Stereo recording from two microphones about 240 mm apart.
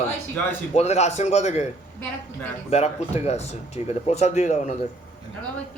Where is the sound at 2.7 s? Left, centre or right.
Left.